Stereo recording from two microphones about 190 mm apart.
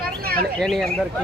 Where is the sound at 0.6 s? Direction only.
Centre (ahead or behind).